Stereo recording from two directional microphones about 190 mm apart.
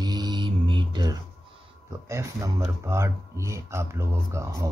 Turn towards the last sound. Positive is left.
turn(degrees=-15)  # may be behind; listen again after turning